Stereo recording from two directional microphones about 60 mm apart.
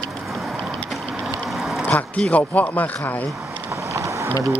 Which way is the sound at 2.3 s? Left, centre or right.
Left.